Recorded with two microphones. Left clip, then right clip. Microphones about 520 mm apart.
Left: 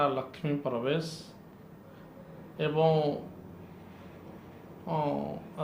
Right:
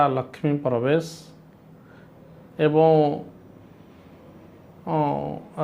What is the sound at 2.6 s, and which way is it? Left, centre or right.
Speech, right.